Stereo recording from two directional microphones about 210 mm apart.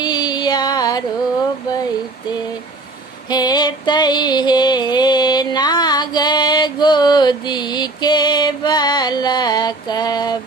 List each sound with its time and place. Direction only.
0.0 s music: 20° left (ahead or behind)
3.2 s music: 20° left (ahead or behind)